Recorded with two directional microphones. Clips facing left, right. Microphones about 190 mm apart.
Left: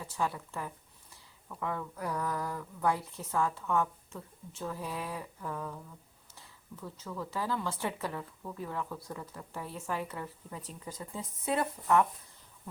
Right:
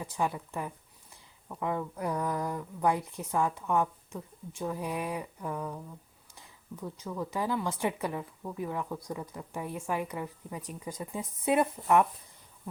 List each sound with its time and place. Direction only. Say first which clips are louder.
0.0 s speech: right 2 dB; 15° right (ahead or behind)